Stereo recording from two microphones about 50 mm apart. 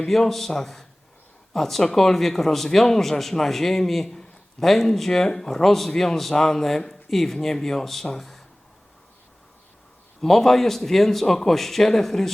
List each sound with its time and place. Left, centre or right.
0.0 s speech: centre
10.2 s speech: centre